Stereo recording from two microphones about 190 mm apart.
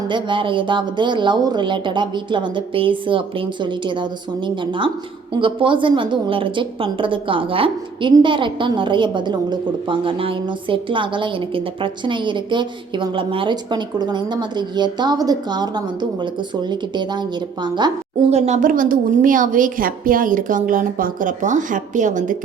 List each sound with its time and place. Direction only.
0.1 s a woman's voice: 25° right (ahead or behind)
18.3 s a woman's voice: 35° right (ahead or behind)